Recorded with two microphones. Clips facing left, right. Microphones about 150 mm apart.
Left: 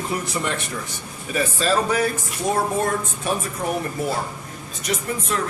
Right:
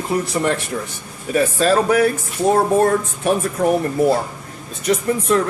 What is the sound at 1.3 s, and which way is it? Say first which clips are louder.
Speech: right 6 dB; 60° right (ahead or behind).